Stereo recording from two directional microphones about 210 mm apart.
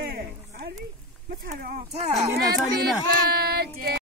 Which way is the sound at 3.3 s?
45° right (ahead or behind).